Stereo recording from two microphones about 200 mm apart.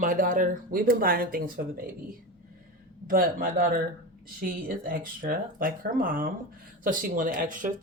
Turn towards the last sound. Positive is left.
turn(degrees=-40)  # may be behind; listen again after turning